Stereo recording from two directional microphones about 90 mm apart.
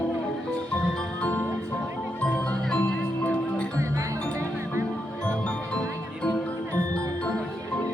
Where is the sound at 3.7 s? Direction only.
30° right (ahead or behind).